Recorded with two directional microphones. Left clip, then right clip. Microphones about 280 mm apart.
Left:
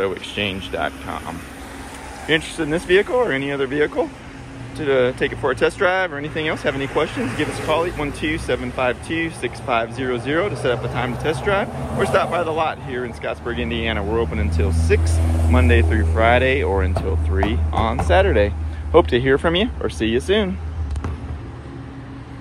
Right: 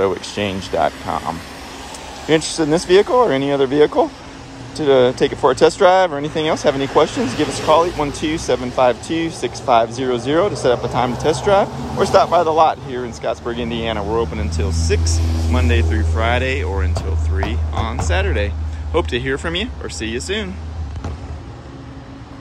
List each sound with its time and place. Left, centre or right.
0.0 s speech: centre